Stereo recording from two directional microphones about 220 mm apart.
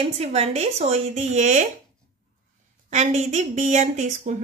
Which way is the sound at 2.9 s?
30° right (ahead or behind).